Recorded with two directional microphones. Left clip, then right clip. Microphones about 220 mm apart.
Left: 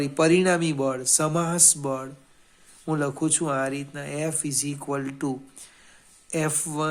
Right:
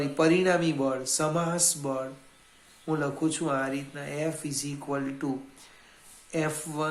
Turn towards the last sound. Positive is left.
turn(degrees=45)  # may be behind; listen again after turning